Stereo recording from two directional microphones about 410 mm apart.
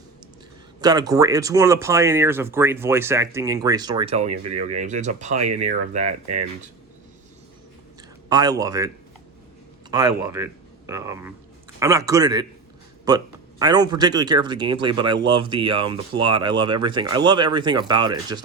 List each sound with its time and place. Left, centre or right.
0.8 s speech: centre
8.3 s speech: centre
9.9 s speech: centre